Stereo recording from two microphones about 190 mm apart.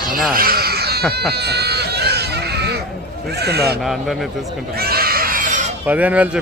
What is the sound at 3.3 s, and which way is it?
Speech, 60° right (ahead or behind).